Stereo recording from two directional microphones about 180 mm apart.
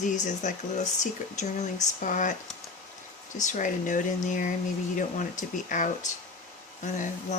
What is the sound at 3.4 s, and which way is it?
Speech, 45° left (ahead or behind).